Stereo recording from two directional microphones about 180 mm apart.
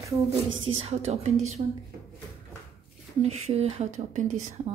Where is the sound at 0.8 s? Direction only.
35° right (ahead or behind).